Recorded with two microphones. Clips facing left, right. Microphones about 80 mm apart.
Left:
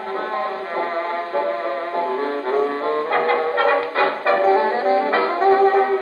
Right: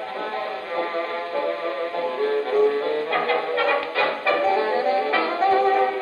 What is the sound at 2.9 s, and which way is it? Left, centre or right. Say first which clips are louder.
Music: left 4 dB; left.